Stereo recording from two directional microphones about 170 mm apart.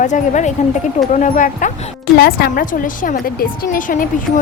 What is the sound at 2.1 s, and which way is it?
A woman's voice, 65° left (ahead or behind).